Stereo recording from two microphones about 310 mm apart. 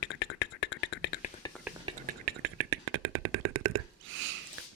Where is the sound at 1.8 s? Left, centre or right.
Right.